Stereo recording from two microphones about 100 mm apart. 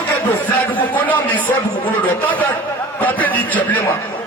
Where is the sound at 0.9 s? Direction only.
15° left (ahead or behind).